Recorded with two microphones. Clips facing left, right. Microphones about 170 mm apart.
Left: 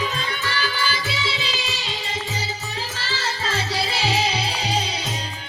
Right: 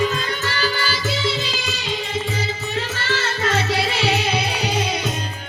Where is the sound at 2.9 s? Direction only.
75° right (ahead or behind).